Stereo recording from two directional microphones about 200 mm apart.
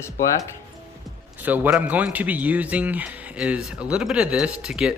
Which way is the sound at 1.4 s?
10° right (ahead or behind).